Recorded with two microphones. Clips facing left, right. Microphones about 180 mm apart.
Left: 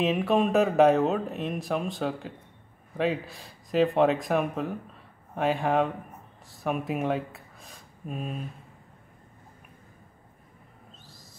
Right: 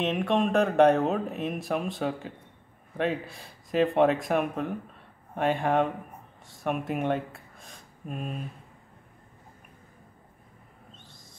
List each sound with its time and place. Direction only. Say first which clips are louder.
0.0 s speech: left 2 dB; 5° left (ahead or behind)
11.0 s owl: left 1 dB; 5° left (ahead or behind)